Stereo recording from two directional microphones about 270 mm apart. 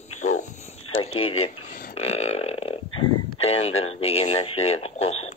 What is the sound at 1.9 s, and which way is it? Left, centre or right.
Speech, left.